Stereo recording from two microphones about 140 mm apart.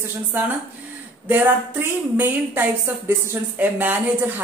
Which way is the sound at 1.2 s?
10° right (ahead or behind).